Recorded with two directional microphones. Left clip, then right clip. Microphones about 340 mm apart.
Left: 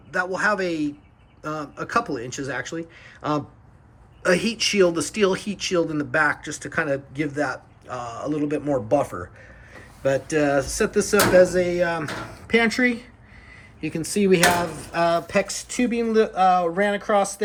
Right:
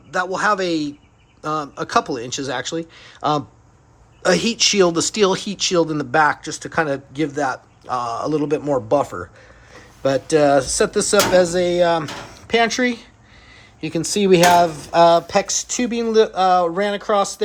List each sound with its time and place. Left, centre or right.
0.3 s speech: centre